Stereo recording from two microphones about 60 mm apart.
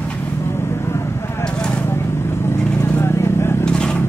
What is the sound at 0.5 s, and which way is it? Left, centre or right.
Vehicle, left.